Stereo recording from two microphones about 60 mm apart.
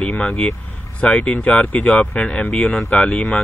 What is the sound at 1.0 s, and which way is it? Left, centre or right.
Speech, centre.